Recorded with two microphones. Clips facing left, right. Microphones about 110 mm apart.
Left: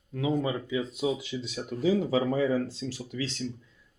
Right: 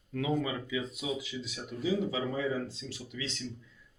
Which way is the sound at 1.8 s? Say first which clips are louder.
Left 6 dB; 45° left (ahead or behind).